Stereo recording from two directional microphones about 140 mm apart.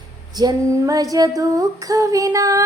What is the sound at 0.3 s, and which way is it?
Female singing, 25° right (ahead or behind).